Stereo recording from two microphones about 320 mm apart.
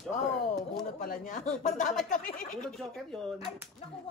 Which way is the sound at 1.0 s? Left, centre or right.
Left.